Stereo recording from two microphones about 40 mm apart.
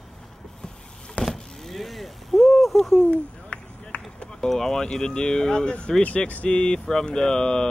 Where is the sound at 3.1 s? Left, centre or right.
Left.